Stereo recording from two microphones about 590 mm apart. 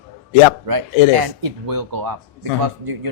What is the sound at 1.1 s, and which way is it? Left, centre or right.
Speech, right.